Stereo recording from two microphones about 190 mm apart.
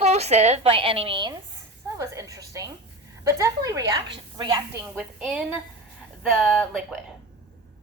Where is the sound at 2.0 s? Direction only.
15° right (ahead or behind).